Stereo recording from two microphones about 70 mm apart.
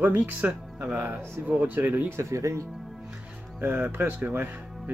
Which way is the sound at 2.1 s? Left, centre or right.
Right.